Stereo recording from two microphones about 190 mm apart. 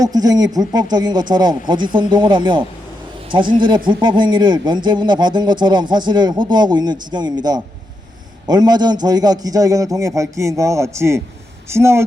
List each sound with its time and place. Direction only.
0.0 s a man's voice: 20° right (ahead or behind)